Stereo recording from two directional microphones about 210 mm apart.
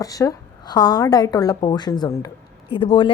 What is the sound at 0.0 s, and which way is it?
A woman's voice, 15° left (ahead or behind).